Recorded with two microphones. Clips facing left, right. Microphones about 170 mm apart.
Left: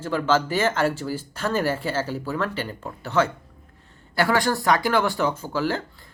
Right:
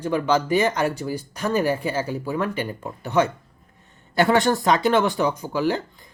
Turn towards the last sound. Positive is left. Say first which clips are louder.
# right 2 dB
turn(degrees=-15)  # may be behind; listen again after turning